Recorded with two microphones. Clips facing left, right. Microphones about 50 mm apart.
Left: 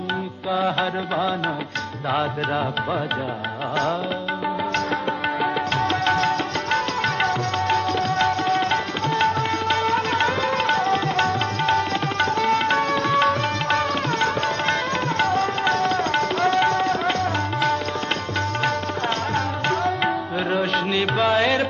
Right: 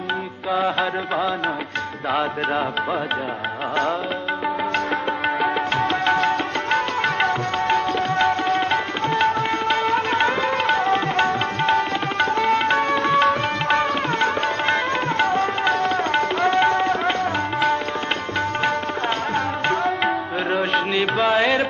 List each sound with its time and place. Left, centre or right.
0.5 s music: right
0.7 s music: centre
5.4 s music: centre
19.3 s tabla: centre